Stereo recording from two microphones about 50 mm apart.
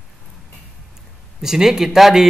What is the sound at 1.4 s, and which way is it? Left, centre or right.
Speech, centre.